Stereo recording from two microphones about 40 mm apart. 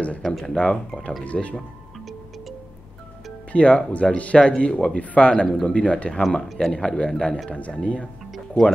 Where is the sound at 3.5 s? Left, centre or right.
Left.